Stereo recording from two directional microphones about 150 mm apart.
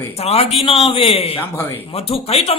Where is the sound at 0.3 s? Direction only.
40° left (ahead or behind).